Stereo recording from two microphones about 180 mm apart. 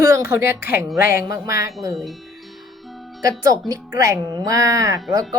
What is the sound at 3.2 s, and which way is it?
Speech, 20° right (ahead or behind).